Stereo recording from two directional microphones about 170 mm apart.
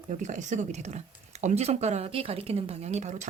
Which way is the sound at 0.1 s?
45° right (ahead or behind).